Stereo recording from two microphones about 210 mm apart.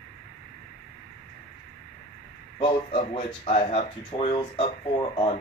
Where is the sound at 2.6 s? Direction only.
25° left (ahead or behind).